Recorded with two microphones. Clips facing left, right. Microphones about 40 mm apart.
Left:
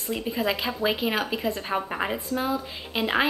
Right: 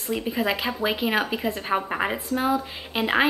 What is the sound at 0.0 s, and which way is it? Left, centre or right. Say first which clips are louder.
A woman's voice: right 2 dB; centre.